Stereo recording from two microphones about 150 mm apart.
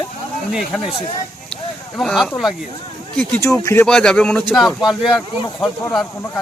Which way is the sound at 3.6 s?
20° left (ahead or behind).